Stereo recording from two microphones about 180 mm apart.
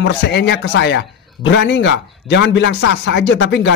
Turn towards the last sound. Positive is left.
turn(degrees=85)